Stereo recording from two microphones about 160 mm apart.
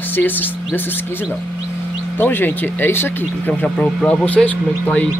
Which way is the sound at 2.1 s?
10° left (ahead or behind).